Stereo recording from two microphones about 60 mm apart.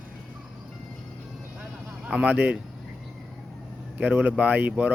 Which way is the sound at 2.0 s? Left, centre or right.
Right.